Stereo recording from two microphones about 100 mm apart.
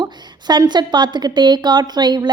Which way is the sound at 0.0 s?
45° right (ahead or behind).